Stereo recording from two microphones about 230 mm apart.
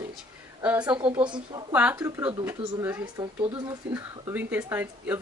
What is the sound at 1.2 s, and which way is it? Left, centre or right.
Speech, centre.